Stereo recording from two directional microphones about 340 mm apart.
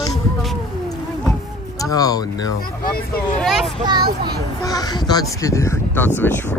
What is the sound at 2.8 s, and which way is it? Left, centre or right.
Speech, left.